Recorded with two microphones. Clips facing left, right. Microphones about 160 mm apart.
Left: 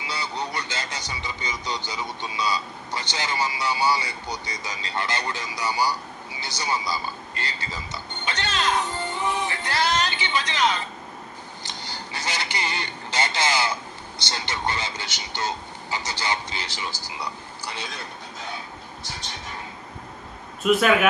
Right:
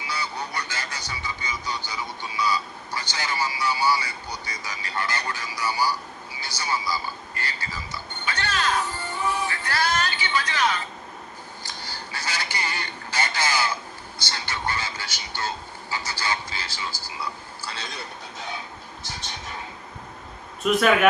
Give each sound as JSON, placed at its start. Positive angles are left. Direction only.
{"t": 0.1, "sound": "a sound", "side_deg": 20}
{"t": 6.4, "sound": "speech", "side_deg": 20}
{"t": 20.7, "sound": "speech", "side_deg": 5}